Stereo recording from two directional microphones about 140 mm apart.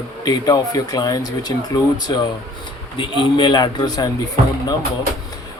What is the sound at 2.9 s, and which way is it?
Speech, 35° left (ahead or behind).